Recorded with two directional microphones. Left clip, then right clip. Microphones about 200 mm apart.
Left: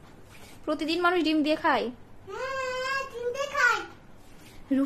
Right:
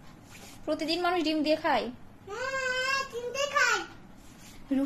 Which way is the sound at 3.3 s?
15° left (ahead or behind).